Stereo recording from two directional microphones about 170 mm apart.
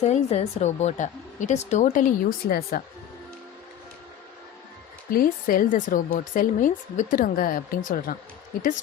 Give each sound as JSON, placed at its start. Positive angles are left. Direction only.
{"t": 0.0, "sound": "speech", "side_deg": 40}
{"t": 5.1, "sound": "speech", "side_deg": 55}